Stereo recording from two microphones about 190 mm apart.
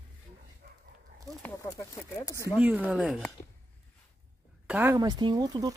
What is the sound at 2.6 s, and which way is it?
Speech, 5° right (ahead or behind).